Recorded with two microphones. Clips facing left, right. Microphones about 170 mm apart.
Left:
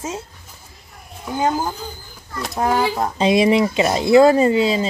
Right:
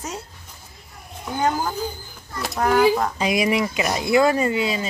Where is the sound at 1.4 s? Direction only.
25° left (ahead or behind).